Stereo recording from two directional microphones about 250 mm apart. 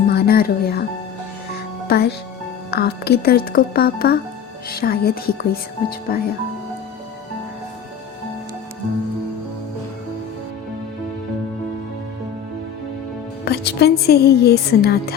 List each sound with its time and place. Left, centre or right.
0.1 s speech: left
1.9 s a woman's voice: left
13.4 s a woman's voice: left